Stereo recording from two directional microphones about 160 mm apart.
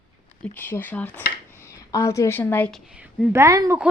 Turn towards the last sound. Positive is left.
turn(degrees=-20)  # may be behind; listen again after turning